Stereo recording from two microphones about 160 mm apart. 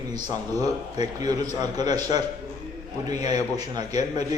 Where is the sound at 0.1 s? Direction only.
25° right (ahead or behind).